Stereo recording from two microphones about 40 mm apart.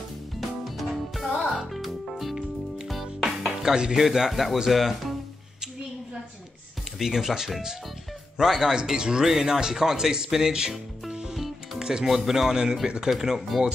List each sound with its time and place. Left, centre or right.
0.4 s music: centre
3.6 s speech: centre
3.9 s speech: centre
7.0 s speech: centre
8.7 s speech: centre
11.3 s music: centre
11.8 s speech: centre
13.1 s speech: centre